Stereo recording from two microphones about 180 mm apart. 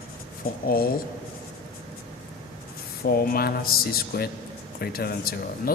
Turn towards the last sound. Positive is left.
turn(degrees=55)  # may be behind; listen again after turning